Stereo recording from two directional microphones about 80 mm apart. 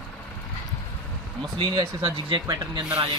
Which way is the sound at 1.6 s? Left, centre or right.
Right.